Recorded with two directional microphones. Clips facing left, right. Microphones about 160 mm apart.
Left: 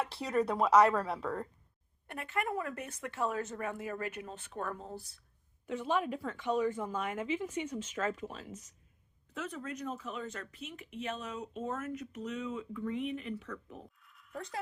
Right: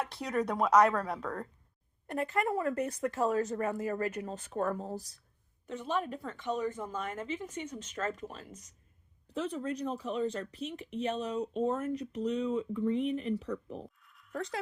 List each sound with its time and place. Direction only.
0.0 s a woman's voice: 5° left (ahead or behind)
2.0 s speech: 35° right (ahead or behind)
5.6 s a woman's voice: 5° left (ahead or behind)
9.3 s speech: 30° right (ahead or behind)
14.0 s a sound: centre (ahead or behind)